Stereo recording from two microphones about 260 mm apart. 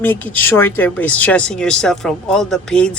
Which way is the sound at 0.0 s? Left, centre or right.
Centre.